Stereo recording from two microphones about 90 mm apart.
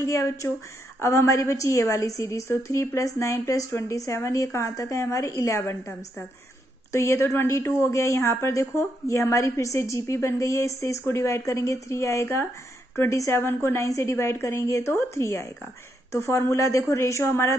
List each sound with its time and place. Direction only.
0.0 s a woman's voice: 35° left (ahead or behind)